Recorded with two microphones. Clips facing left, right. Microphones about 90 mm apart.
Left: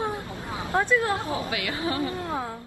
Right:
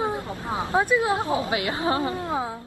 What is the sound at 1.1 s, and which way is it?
A woman's voice, 25° right (ahead or behind).